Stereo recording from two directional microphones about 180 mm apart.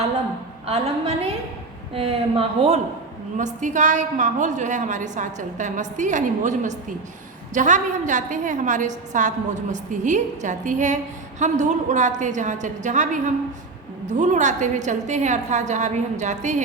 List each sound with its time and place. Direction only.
0.7 s a woman's voice: 35° right (ahead or behind)